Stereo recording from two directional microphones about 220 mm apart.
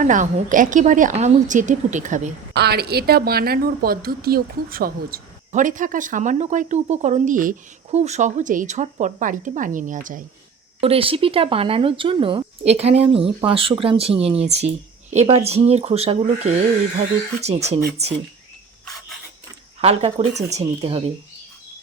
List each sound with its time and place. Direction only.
0.0 s speech: 35° right (ahead or behind)
2.5 s speech: 45° right (ahead or behind)
10.8 s speech: 25° right (ahead or behind)
19.8 s speech: 25° right (ahead or behind)